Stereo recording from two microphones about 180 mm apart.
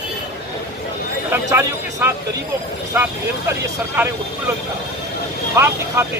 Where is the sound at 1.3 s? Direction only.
15° right (ahead or behind).